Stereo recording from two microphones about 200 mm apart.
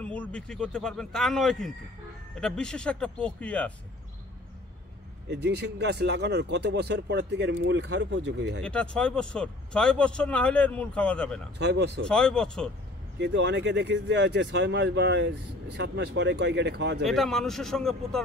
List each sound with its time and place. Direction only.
0.0 s speech: 5° left (ahead or behind)
5.3 s speech: 55° right (ahead or behind)
8.6 s speech: 5° left (ahead or behind)
11.5 s speech: 55° right (ahead or behind)
12.1 s speech: 5° left (ahead or behind)
13.2 s speech: 60° right (ahead or behind)
17.0 s speech: centre (ahead or behind)